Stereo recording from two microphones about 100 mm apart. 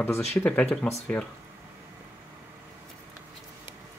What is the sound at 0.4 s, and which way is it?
Speech, 20° left (ahead or behind).